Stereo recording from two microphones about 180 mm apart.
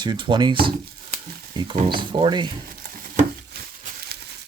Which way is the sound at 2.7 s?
55° right (ahead or behind).